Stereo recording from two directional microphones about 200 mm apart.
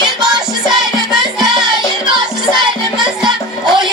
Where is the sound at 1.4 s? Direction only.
20° right (ahead or behind).